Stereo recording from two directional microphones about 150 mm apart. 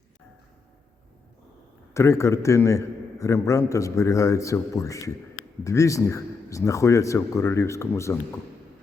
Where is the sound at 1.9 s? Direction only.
20° left (ahead or behind).